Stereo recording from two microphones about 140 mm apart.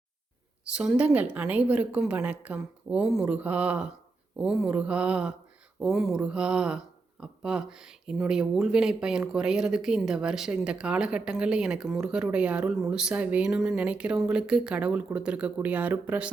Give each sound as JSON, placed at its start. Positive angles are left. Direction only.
{"t": 0.6, "sound": "a woman's voice", "side_deg": -10}